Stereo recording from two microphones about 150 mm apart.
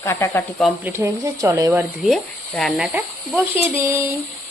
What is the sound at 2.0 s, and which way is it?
Speech, centre (ahead or behind).